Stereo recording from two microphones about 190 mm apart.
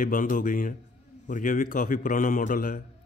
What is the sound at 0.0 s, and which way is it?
A man's voice, 45° left (ahead or behind).